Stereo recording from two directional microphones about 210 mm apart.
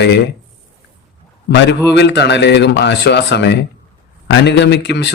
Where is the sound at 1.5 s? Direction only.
55° left (ahead or behind).